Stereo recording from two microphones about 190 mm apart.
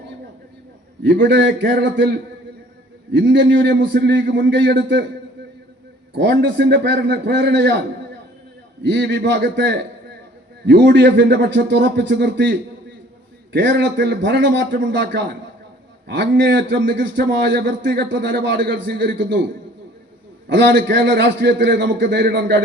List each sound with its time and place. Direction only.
1.0 s a man's voice: 65° right (ahead or behind)
6.1 s a man's voice: 65° right (ahead or behind)
20.5 s a man's voice: 65° right (ahead or behind)